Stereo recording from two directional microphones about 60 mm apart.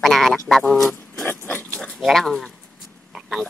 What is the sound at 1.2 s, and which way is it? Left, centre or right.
Pig, left.